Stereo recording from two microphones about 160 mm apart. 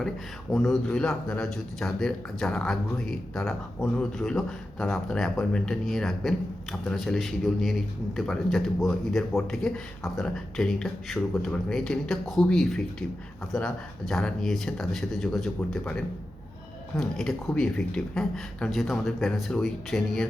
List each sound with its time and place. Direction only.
0.5 s speech: centre (ahead or behind)